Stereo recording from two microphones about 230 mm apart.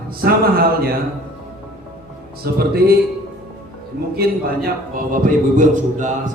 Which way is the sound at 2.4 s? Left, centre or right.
Right.